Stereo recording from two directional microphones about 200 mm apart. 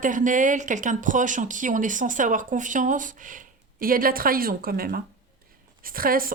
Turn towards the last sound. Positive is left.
turn(degrees=-45)  # may be behind; listen again after turning